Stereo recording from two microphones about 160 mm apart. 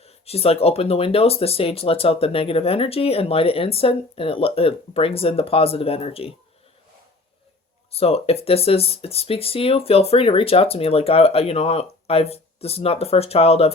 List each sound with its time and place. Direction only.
0.0 s speech: 40° left (ahead or behind)
7.9 s speech: 40° left (ahead or behind)